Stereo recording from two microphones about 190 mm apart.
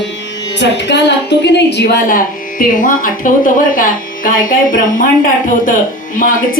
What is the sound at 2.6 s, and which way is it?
Speech, 45° left (ahead or behind).